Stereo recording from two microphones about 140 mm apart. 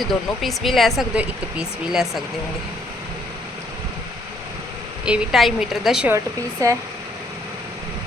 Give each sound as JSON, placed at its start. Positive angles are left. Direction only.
{"t": 0.0, "sound": "speech", "side_deg": 0}
{"t": 5.0, "sound": "speech", "side_deg": -5}
{"t": 6.1, "sound": "speech", "side_deg": -20}